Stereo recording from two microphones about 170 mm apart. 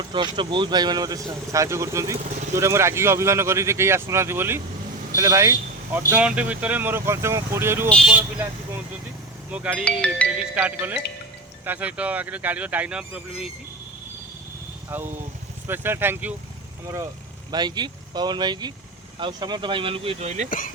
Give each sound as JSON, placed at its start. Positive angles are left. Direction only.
{"t": 0.1, "sound": "speech", "side_deg": -30}
{"t": 7.9, "sound": "speech", "side_deg": 5}
{"t": 8.1, "sound": "speech", "side_deg": -10}
{"t": 9.8, "sound": "speech", "side_deg": 5}
{"t": 10.3, "sound": "speech", "side_deg": -10}
{"t": 14.8, "sound": "speech", "side_deg": -10}
{"t": 17.5, "sound": "speech", "side_deg": -25}
{"t": 20.5, "sound": "speech", "side_deg": 50}